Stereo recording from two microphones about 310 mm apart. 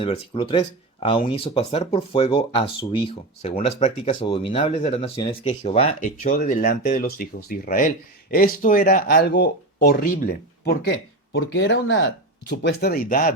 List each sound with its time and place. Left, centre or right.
0.0 s speech: centre